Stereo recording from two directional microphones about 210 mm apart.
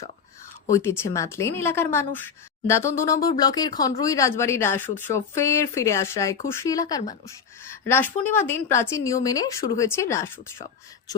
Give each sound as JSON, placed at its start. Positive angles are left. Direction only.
{"t": 0.7, "sound": "speech", "side_deg": 15}